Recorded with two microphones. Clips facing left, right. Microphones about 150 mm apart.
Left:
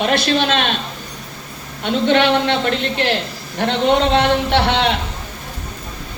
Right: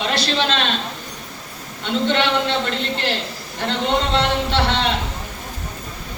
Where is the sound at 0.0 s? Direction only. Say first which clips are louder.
Left 5 dB; 55° left (ahead or behind).